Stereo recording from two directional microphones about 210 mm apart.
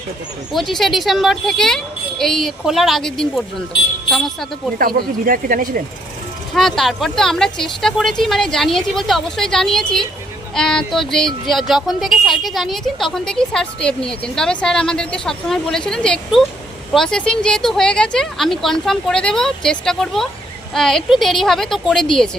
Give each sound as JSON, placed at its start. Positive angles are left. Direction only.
{"t": 0.5, "sound": "speech", "side_deg": 0}
{"t": 4.8, "sound": "speech", "side_deg": -45}
{"t": 6.5, "sound": "speech", "side_deg": 0}